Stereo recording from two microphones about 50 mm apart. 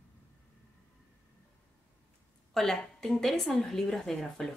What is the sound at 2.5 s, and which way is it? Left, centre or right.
A woman's voice, centre.